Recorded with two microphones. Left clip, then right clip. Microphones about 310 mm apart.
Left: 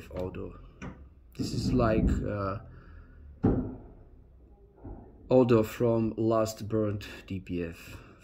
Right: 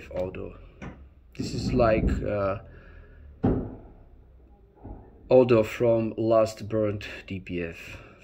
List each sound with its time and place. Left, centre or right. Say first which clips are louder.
0.0 s speech: right 5 dB; centre
5.2 s speech: right 4 dB; centre